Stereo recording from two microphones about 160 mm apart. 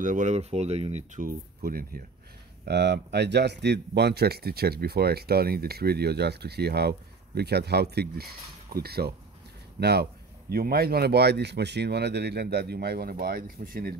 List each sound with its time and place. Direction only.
0.0 s speech: 50° right (ahead or behind)
1.2 s speech: 65° right (ahead or behind)
2.6 s speech: 90° right
8.7 s speech: 80° right
9.8 s speech: 90° right
10.5 s speech: 70° right (ahead or behind)